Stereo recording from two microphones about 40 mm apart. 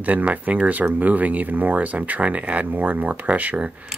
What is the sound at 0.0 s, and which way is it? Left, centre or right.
Speech, right.